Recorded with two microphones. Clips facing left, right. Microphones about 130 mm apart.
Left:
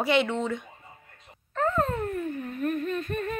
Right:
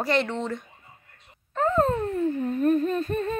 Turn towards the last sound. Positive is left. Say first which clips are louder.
# right 4 dB
turn(degrees=-30)  # may be behind; listen again after turning